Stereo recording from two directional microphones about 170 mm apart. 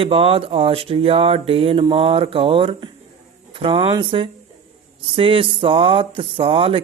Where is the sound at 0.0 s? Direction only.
35° right (ahead or behind).